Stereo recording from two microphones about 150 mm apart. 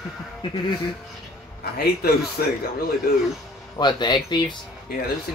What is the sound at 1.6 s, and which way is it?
Speech, 90° left.